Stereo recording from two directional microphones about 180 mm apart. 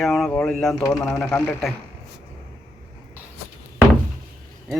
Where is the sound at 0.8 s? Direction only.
15° left (ahead or behind).